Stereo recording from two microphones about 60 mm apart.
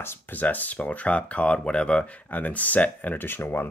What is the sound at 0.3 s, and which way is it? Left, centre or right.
Speech, left.